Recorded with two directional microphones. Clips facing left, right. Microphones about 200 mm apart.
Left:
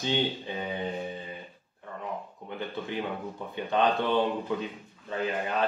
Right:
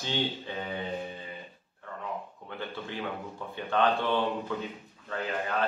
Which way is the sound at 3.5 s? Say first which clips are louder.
Left 1 dB; 15° left (ahead or behind).